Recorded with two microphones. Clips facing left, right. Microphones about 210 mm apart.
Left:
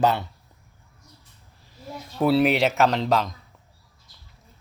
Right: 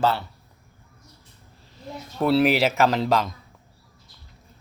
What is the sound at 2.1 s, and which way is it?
Speech, centre (ahead or behind).